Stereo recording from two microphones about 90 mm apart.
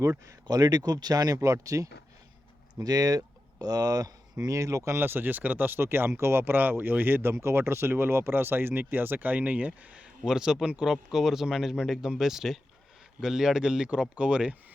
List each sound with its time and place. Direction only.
0.0 s speech: 40° right (ahead or behind); by 14.5 s 10° right (ahead or behind)